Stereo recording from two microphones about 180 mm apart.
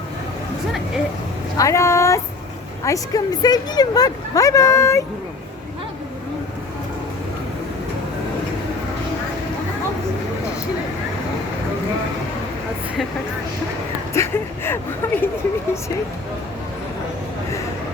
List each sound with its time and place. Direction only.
1.5 s speech: 15° left (ahead or behind)
14.1 s speech: 15° left (ahead or behind)